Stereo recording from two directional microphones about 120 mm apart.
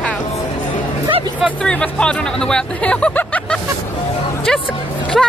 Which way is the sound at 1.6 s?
5° left (ahead or behind).